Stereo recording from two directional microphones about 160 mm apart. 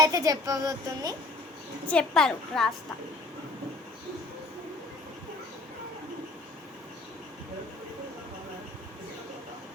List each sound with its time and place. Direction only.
0.0 s speech: 20° right (ahead or behind)
1.9 s a woman's voice: 5° left (ahead or behind)